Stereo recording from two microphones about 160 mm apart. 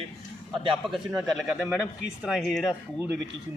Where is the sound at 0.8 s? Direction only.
Centre (ahead or behind).